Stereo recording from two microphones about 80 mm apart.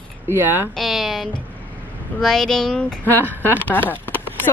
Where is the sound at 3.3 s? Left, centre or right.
Left.